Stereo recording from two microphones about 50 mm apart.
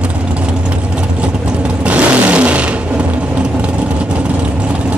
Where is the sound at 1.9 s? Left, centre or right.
Right.